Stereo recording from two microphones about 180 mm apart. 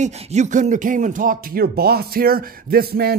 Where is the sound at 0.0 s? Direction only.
40° right (ahead or behind).